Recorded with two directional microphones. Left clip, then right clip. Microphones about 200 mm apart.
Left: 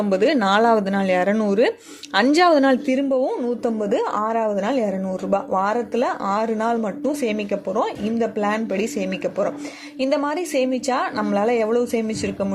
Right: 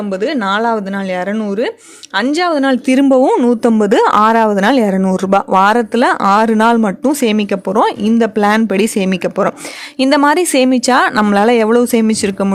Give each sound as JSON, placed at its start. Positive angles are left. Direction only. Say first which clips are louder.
{"t": 0.1, "sound": "speech", "louder": "right 2 dB", "side_deg": -5}
{"t": 2.8, "sound": "speech", "louder": "right 10 dB", "side_deg": -30}